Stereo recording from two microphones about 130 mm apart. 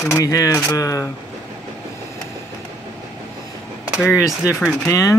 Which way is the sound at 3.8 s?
5° right (ahead or behind).